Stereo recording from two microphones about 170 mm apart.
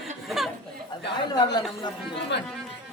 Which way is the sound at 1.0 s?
25° left (ahead or behind).